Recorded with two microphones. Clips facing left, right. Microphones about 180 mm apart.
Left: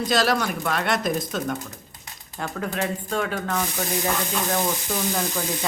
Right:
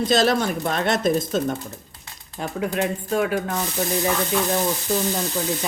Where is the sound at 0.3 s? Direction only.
25° right (ahead or behind).